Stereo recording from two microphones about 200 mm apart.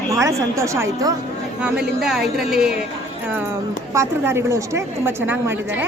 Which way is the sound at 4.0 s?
15° right (ahead or behind).